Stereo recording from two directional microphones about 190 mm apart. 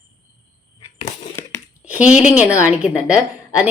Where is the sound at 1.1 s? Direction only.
10° left (ahead or behind).